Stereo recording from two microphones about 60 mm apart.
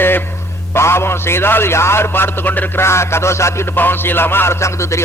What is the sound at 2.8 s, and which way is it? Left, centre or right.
Speech, left.